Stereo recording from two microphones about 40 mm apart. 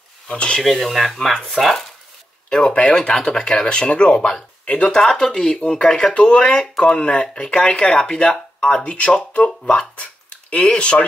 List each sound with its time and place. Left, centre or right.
0.3 s speech: left
0.6 s speech: centre
2.9 s speech: left
5.0 s speech: centre
5.6 s speech: left